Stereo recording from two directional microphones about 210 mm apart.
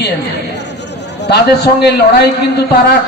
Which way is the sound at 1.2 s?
50° left (ahead or behind).